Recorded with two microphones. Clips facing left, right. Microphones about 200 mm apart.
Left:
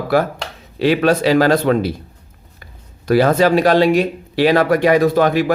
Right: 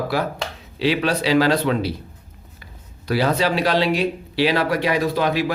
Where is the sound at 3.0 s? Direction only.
50° left (ahead or behind).